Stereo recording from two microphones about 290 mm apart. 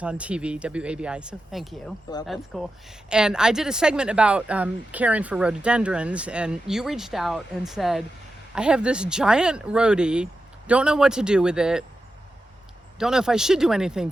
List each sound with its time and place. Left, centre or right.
0.0 s speech: centre
13.0 s speech: centre